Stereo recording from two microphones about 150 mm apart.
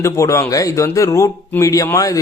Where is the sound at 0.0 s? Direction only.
20° left (ahead or behind).